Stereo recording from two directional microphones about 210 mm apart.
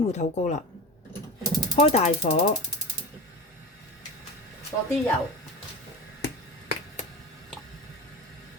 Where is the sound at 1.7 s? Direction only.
30° left (ahead or behind).